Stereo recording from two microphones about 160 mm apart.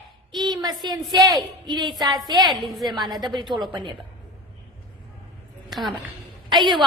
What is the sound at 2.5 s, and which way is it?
Speech, centre (ahead or behind).